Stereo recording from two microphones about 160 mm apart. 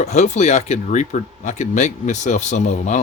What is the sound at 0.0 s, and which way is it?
Speech, 45° left (ahead or behind).